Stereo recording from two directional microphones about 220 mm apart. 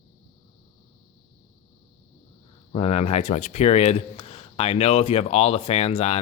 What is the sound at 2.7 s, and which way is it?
Speech, 30° left (ahead or behind).